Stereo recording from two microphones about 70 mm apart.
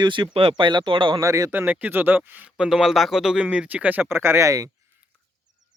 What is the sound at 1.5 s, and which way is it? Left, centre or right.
Speech, right.